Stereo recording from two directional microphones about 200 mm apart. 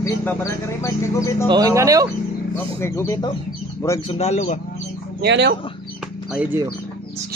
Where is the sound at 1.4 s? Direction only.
20° right (ahead or behind).